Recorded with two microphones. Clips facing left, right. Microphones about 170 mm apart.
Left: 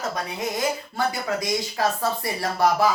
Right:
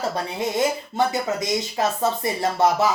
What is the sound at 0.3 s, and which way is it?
Speech, 25° right (ahead or behind).